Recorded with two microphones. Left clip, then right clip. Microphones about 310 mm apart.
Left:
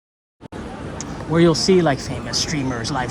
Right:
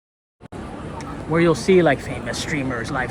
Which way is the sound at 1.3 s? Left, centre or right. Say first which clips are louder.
Left 1 dB; centre.